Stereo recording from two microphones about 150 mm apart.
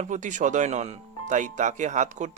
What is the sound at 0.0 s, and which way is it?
Speech, 55° right (ahead or behind).